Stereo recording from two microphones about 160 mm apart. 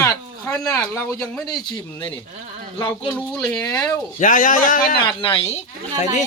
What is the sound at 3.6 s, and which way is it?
Speech, 25° left (ahead or behind).